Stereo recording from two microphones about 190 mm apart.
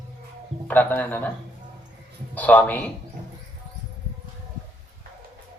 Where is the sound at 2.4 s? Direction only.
10° left (ahead or behind).